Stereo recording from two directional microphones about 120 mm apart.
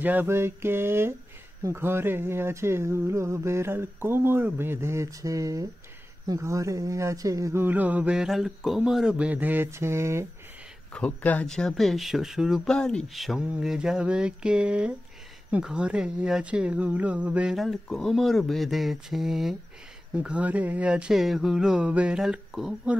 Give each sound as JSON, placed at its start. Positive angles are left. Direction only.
{"t": 0.0, "sound": "speech", "side_deg": -15}
{"t": 7.6, "sound": "speech", "side_deg": -15}
{"t": 10.9, "sound": "speech", "side_deg": 10}
{"t": 12.7, "sound": "speech", "side_deg": 5}